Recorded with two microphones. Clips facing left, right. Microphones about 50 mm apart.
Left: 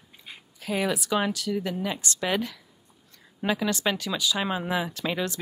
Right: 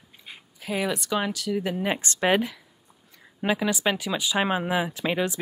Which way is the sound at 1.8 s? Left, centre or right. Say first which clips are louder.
Right 5 dB; right.